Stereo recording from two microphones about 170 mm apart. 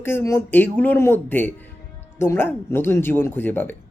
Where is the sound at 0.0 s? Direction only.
15° left (ahead or behind).